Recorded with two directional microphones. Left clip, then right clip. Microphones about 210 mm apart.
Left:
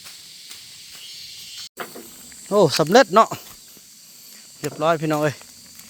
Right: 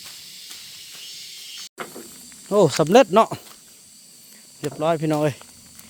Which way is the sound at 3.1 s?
15° right (ahead or behind).